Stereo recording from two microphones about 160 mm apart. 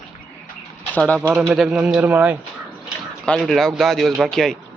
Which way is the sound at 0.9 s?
5° left (ahead or behind).